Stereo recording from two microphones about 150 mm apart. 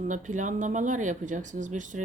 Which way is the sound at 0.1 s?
55° right (ahead or behind).